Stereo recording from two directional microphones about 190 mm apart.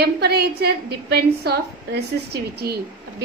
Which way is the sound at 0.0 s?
60° right (ahead or behind).